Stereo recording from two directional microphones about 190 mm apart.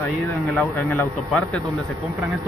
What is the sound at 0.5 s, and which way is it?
Speech, 10° left (ahead or behind).